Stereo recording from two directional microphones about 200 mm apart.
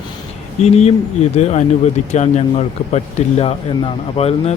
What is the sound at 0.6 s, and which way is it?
Speech, 30° left (ahead or behind).